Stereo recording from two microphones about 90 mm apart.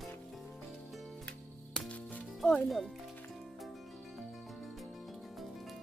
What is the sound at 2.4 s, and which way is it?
Speech, 5° left (ahead or behind).